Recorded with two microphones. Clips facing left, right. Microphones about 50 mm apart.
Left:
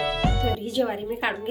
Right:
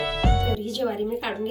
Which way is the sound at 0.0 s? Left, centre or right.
Centre.